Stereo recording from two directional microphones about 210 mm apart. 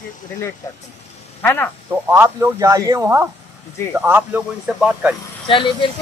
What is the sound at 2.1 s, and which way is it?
Speech, 10° right (ahead or behind).